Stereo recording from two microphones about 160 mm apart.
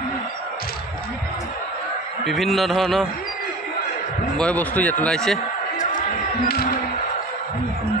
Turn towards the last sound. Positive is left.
turn(degrees=65)  # may be behind; listen again after turning